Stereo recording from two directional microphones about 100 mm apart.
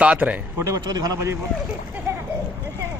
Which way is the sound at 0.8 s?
40° right (ahead or behind).